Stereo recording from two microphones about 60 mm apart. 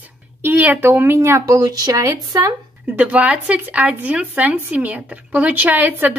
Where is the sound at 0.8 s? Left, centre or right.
Right.